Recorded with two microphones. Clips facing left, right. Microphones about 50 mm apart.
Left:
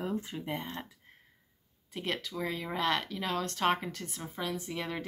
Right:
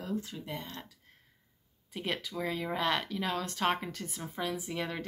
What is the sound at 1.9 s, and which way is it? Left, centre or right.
Speech, centre.